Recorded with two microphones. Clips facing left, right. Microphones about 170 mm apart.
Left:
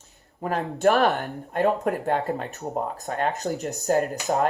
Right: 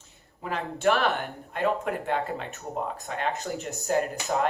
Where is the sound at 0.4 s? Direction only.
40° left (ahead or behind).